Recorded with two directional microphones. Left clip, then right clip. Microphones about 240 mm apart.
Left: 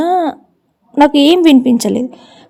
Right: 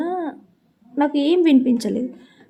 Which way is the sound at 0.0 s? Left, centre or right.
Left.